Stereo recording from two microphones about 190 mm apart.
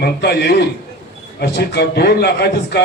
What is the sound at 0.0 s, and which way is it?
A man's voice, 60° left (ahead or behind).